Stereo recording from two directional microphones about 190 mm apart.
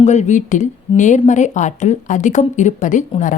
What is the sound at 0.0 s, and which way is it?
A woman's voice, 35° left (ahead or behind).